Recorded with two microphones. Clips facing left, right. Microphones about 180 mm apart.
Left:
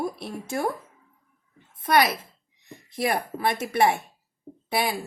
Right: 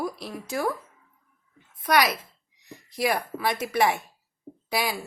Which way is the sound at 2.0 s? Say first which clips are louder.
Left 2 dB; 55° left (ahead or behind).